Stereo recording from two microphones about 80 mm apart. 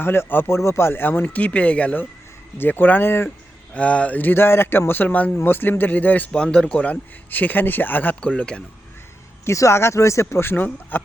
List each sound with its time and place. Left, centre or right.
0.0 s speech: left
3.8 s speech: centre
6.4 s speech: centre
9.5 s speech: left